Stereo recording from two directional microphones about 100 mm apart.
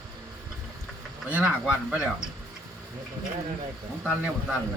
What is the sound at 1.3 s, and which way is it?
Speech, 15° right (ahead or behind).